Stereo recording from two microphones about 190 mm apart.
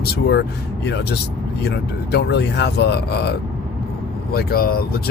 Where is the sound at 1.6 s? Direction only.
60° left (ahead or behind).